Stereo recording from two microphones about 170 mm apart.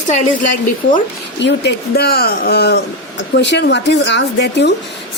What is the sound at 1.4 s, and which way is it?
A woman's voice, 90° left.